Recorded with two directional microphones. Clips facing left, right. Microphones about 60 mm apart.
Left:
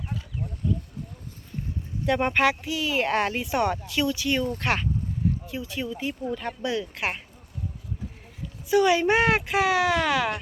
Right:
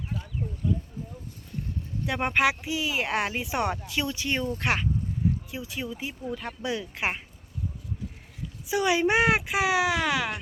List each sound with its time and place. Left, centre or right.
2.0 s speech: centre
3.4 s speech: centre
4.5 s speech: centre
8.6 s speech: centre